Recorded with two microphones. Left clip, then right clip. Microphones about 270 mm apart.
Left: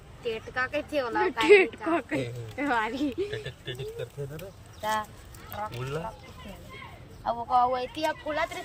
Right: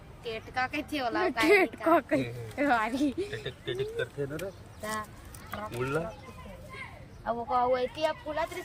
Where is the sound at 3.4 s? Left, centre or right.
Left.